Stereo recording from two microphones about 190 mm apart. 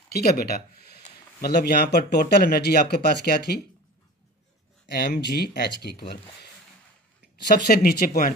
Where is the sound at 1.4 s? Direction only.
55° left (ahead or behind).